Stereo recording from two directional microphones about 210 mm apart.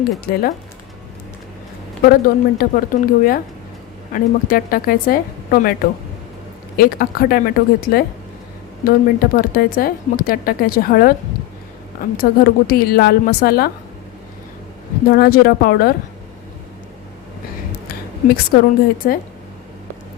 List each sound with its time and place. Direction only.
0.3 s a woman's voice: 45° left (ahead or behind)
2.0 s a woman's voice: 45° left (ahead or behind)
6.7 s a woman's voice: 45° left (ahead or behind)
12.1 s a woman's voice: 45° left (ahead or behind)
15.1 s a woman's voice: 45° left (ahead or behind)
17.8 s a sound: 45° left (ahead or behind)
19.0 s a woman's voice: 45° left (ahead or behind)